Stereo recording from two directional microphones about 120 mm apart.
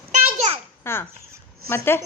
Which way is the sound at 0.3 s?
60° right (ahead or behind).